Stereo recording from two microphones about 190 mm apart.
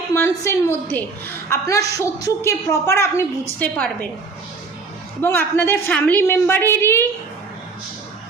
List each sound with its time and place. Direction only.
0.1 s a woman's voice: 15° left (ahead or behind)
5.2 s a woman's voice: 10° left (ahead or behind)